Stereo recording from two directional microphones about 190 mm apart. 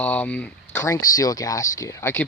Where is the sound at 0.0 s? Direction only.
10° left (ahead or behind).